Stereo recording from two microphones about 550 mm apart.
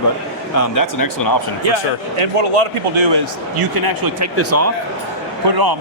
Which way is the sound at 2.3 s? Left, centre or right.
Right.